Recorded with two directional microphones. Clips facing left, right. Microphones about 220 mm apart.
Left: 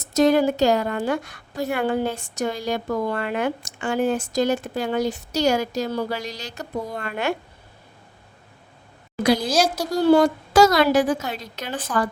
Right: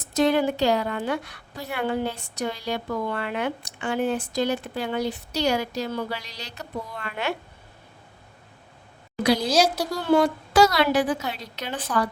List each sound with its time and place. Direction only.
0.0 s a woman's voice: 40° left (ahead or behind)
9.8 s a woman's voice: 40° left (ahead or behind)